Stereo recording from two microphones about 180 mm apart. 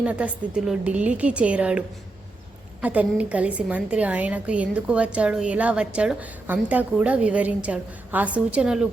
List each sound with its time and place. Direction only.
0.0 s a woman's voice: 5° right (ahead or behind)
2.8 s a woman's voice: 5° right (ahead or behind)